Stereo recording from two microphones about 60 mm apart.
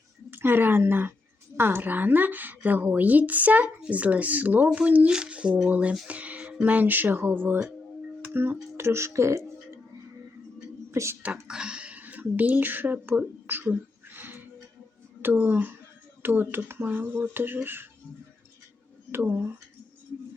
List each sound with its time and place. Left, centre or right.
0.3 s a woman's voice: right
5.1 s speech: centre; by 9.4 s right
10.9 s speech: right
11.4 s a woman's voice: centre; by 17.8 s right
19.1 s a woman's voice: right